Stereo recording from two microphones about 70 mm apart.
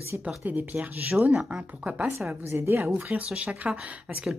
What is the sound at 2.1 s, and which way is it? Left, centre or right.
Speech, right.